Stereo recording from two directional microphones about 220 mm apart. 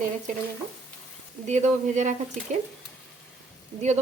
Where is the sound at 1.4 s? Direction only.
30° right (ahead or behind).